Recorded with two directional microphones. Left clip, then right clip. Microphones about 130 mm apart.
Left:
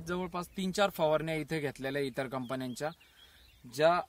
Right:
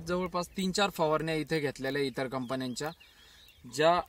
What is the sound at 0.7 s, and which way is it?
Speech, 20° left (ahead or behind).